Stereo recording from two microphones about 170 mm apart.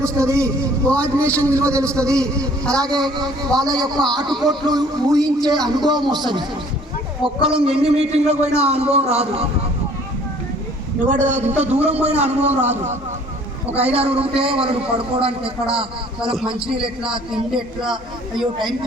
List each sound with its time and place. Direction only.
0.0 s a man's voice: 15° right (ahead or behind)
0.9 s a man's voice: 5° left (ahead or behind)
1.7 s a man's voice: 15° right (ahead or behind)
2.1 s a man's voice: 5° left (ahead or behind)
2.8 s speech: 25° right (ahead or behind)
4.3 s a man's voice: centre (ahead or behind)
4.6 s speech: 25° right (ahead or behind)
7.4 s a man's voice: 30° right (ahead or behind)
11.0 s a man's voice: 45° right (ahead or behind)
13.7 s a man's voice: 35° right (ahead or behind)
17.5 s a man's voice: 5° right (ahead or behind)